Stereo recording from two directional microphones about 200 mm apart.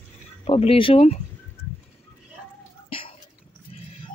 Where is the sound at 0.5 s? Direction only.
30° left (ahead or behind).